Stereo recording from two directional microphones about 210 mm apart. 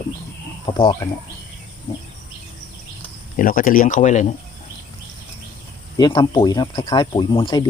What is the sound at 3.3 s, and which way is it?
Speech, 40° left (ahead or behind).